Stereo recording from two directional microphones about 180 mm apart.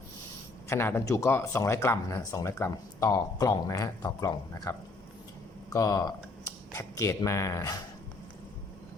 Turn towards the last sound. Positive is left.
turn(degrees=20)  # may be behind; listen again after turning